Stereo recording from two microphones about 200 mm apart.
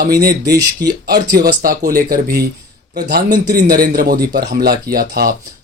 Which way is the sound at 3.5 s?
45° right (ahead or behind).